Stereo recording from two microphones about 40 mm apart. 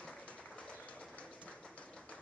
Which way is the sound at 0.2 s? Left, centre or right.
Left.